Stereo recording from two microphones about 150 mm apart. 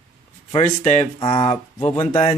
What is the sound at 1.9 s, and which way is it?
Speech, 45° left (ahead or behind).